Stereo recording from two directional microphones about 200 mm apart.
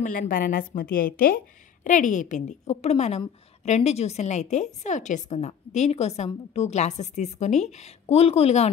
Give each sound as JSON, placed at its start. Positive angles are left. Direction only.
{"t": 0.0, "sound": "a woman's voice", "side_deg": 40}